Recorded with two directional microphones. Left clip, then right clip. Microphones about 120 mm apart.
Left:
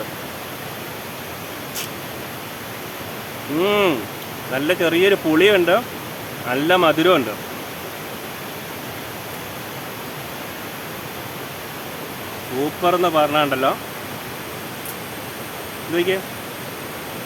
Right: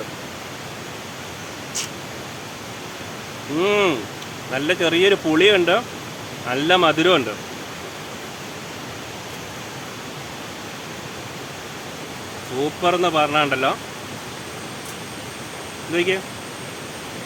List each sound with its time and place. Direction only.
3.6 s speech: 20° left (ahead or behind)
12.8 s speech: 10° left (ahead or behind)
16.0 s speech: 10° left (ahead or behind)